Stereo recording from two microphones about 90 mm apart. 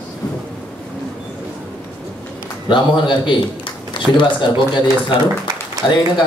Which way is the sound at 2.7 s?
65° left (ahead or behind).